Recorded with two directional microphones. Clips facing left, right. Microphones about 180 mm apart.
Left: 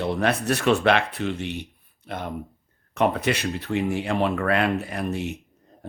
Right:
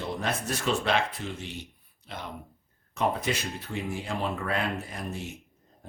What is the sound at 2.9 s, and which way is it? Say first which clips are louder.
Speech: left 6 dB; 70° left (ahead or behind).